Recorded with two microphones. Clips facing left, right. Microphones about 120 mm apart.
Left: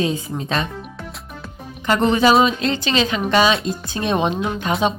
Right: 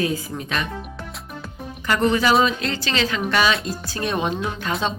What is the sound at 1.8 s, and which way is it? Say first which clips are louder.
Speech: left 3 dB; 25° left (ahead or behind).